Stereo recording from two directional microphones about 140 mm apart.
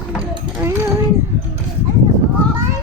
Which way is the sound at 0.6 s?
20° right (ahead or behind).